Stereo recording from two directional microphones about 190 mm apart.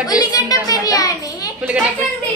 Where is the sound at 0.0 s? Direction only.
20° left (ahead or behind).